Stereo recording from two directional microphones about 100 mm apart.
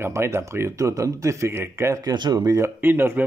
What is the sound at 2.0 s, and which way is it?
Speech, 40° right (ahead or behind).